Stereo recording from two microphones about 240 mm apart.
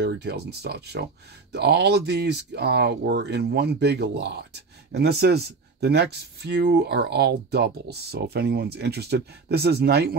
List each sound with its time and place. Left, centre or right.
0.0 s speech: right